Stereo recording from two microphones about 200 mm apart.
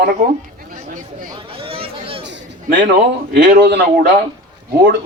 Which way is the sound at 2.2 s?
60° right (ahead or behind).